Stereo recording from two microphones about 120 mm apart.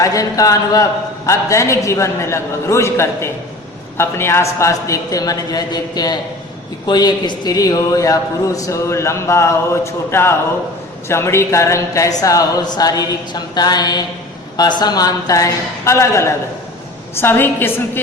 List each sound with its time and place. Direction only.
0.0 s a man's voice: 30° left (ahead or behind)
13.3 s mantra: 35° left (ahead or behind)
14.5 s a man's voice: 35° left (ahead or behind); by 18.0 s 20° left (ahead or behind)